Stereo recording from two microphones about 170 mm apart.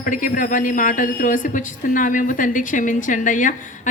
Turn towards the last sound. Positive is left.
turn(degrees=50)  # may be behind; listen again after turning